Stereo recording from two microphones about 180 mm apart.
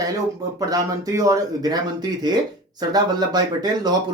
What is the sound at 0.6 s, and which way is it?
Speech, 20° right (ahead or behind).